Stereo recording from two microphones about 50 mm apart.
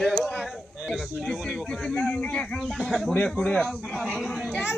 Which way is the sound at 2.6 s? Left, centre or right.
Centre.